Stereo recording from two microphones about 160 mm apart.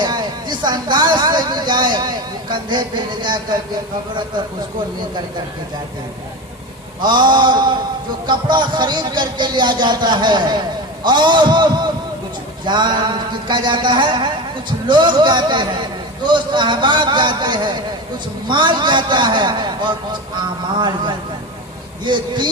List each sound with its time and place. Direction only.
0.0 s speech: 25° right (ahead or behind)
7.0 s a man's voice: 30° right (ahead or behind)